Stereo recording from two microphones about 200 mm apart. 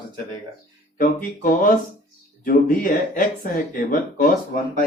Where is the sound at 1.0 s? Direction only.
45° left (ahead or behind).